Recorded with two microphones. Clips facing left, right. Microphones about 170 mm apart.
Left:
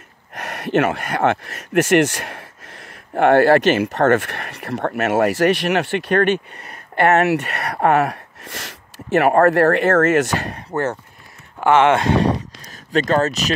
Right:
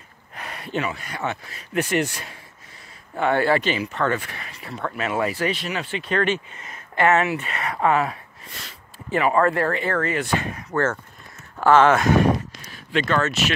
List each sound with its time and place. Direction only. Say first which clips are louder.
0.3 s speech: left 9 dB; 80° left
10.7 s speech: left 1 dB; 25° left (ahead or behind)